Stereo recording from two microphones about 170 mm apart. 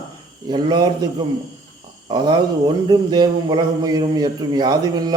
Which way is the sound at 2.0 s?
25° right (ahead or behind).